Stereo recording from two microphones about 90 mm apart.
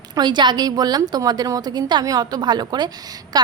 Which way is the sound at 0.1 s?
55° right (ahead or behind).